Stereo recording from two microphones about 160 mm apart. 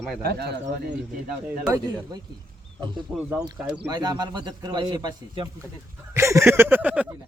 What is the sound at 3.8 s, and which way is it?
A man's voice, 25° right (ahead or behind).